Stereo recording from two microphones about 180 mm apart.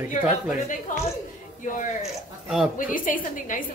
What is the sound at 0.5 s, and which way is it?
Speech, 45° left (ahead or behind).